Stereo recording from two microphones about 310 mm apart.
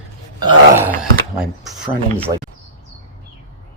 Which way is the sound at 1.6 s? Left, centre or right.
Centre.